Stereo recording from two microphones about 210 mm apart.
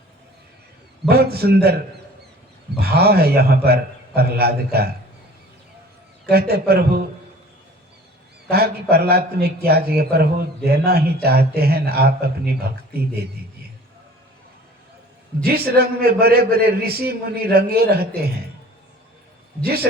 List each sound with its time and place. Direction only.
1.0 s a man's voice: 50° right (ahead or behind)
2.7 s a man's voice: 50° right (ahead or behind)
6.2 s a man's voice: 50° right (ahead or behind)
8.4 s a man's voice: 50° right (ahead or behind)
15.4 s a man's voice: 45° right (ahead or behind)
19.6 s a man's voice: 45° right (ahead or behind)